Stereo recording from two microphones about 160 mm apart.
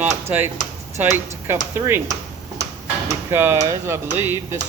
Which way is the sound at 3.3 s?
15° right (ahead or behind).